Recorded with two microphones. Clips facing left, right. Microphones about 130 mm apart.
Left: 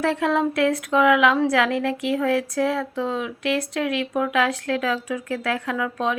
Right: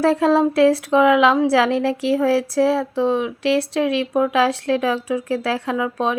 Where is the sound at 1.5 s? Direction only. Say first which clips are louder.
Right 4 dB; 30° right (ahead or behind).